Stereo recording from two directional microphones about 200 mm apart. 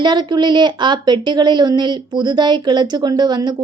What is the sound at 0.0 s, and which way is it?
Speech, 20° right (ahead or behind).